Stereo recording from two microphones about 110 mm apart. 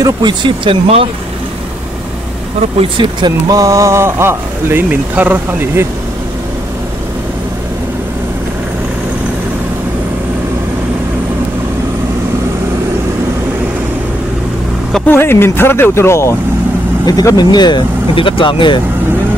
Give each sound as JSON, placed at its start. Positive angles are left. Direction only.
{"t": 0.0, "sound": "speech", "side_deg": -45}
{"t": 3.0, "sound": "speech", "side_deg": -45}
{"t": 15.0, "sound": "speech", "side_deg": 20}
{"t": 17.0, "sound": "speech", "side_deg": 35}